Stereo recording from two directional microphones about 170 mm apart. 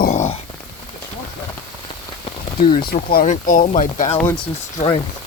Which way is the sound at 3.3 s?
50° left (ahead or behind).